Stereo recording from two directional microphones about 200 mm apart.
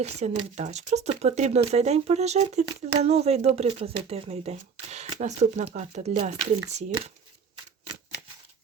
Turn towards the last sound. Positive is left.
turn(degrees=-35)  # may be behind; listen again after turning